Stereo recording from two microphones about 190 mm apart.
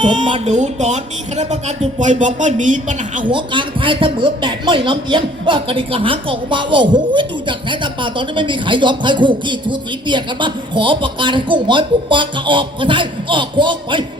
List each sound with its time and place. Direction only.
0.0 s speech: 25° right (ahead or behind); by 3.2 s 40° right (ahead or behind)
3.2 s speech: 25° right (ahead or behind)